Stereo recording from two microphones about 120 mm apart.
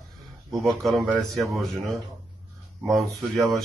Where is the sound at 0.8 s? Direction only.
Centre (ahead or behind).